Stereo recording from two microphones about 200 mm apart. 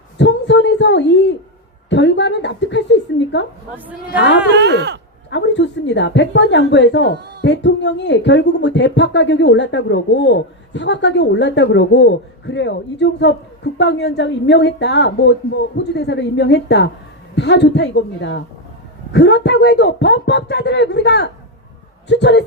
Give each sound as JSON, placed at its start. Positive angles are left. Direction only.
{"t": 0.2, "sound": "a sound", "side_deg": 60}
{"t": 1.9, "sound": "speech", "side_deg": 60}
{"t": 4.5, "sound": "speech", "side_deg": -60}
{"t": 5.3, "sound": "speech", "side_deg": 60}